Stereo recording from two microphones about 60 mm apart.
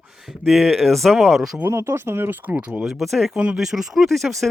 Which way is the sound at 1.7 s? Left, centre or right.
Right.